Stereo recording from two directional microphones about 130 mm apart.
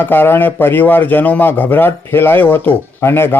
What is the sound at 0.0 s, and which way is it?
Speech, 15° left (ahead or behind).